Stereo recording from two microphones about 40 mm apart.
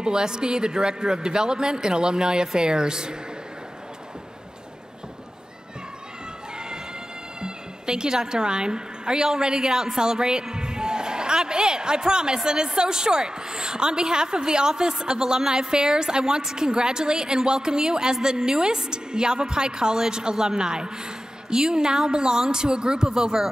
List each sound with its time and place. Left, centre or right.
0.0 s a woman's voice: centre
7.4 s a woman's voice: centre